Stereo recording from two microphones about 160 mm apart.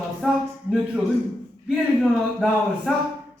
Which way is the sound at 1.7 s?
Centre (ahead or behind).